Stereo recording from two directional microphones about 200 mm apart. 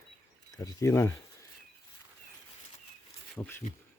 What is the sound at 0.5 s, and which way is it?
Speech, 15° left (ahead or behind).